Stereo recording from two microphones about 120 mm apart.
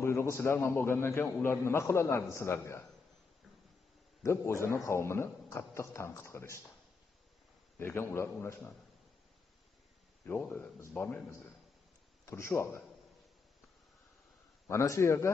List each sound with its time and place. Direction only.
0.0 s a man's voice: 20° left (ahead or behind)
4.2 s a man's voice: 25° left (ahead or behind)
7.8 s a man's voice: 20° left (ahead or behind)
10.2 s a man's voice: 20° left (ahead or behind)
12.3 s a man's voice: 25° left (ahead or behind)
14.7 s a man's voice: 25° left (ahead or behind)